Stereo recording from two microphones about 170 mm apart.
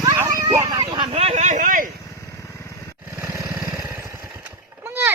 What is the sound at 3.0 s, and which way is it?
Vehicle, 15° right (ahead or behind).